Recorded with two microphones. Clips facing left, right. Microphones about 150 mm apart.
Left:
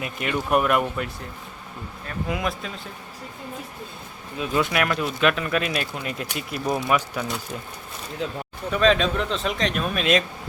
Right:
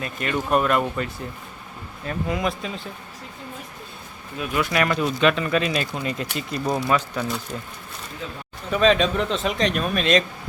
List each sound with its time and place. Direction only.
0.0 s speech: 10° left (ahead or behind)
2.3 s speech: centre (ahead or behind)
4.4 s speech: 25° left (ahead or behind)
4.7 s speech: 5° left (ahead or behind)
8.7 s speech: centre (ahead or behind)